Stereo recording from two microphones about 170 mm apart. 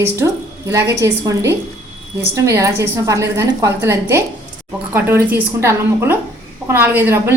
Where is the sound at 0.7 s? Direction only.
15° right (ahead or behind).